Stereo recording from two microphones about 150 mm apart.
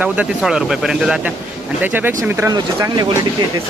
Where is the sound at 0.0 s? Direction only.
5° right (ahead or behind); by 3.1 s 25° right (ahead or behind).